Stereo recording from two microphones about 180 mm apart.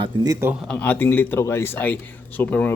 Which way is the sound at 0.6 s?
5° left (ahead or behind).